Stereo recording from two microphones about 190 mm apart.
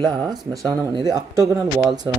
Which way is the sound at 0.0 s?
20° right (ahead or behind).